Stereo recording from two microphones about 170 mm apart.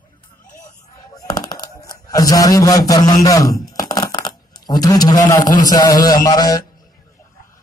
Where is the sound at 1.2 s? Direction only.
20° left (ahead or behind).